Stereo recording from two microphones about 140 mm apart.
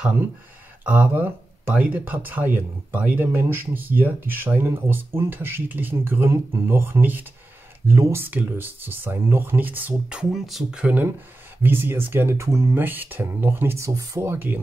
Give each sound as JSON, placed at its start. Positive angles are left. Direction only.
{"t": 0.8, "sound": "speech", "side_deg": -10}